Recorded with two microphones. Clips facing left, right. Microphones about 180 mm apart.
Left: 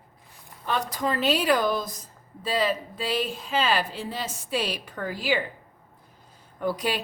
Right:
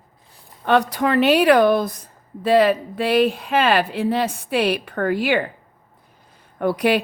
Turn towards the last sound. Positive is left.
turn(degrees=-65)  # may be behind; listen again after turning